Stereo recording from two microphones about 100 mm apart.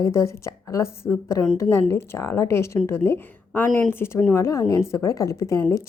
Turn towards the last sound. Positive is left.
turn(degrees=30)  # may be behind; listen again after turning